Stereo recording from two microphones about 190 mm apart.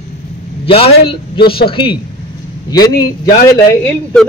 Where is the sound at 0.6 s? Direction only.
30° left (ahead or behind).